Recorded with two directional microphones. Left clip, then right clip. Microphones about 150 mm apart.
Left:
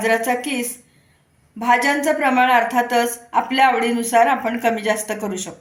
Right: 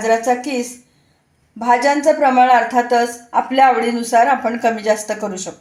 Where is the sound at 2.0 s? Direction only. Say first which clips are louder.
Right 5 dB; 15° right (ahead or behind).